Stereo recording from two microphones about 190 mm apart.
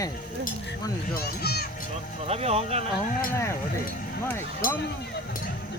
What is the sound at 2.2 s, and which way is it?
Speech, 35° right (ahead or behind).